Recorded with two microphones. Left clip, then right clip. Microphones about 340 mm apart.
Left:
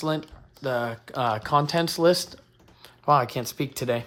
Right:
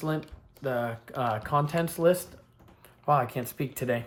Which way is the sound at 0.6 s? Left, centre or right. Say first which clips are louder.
Left 3 dB; centre.